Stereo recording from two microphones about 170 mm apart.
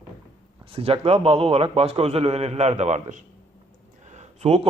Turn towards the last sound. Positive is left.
turn(degrees=-35)  # may be behind; listen again after turning